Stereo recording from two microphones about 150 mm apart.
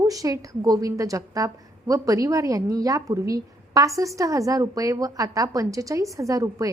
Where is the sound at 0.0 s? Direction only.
25° right (ahead or behind).